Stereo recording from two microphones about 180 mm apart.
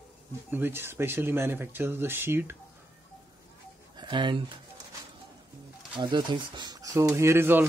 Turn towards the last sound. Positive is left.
turn(degrees=-10)  # may be behind; listen again after turning